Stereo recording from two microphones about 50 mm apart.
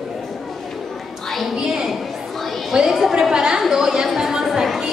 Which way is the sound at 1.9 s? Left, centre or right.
Centre.